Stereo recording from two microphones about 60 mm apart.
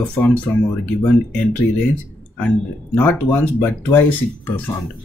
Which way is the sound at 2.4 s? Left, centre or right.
Left.